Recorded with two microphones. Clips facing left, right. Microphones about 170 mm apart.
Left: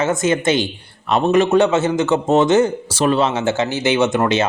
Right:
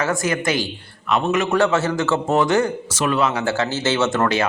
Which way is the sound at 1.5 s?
20° left (ahead or behind).